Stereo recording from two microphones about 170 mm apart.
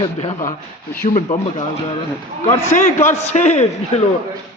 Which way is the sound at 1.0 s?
55° left (ahead or behind).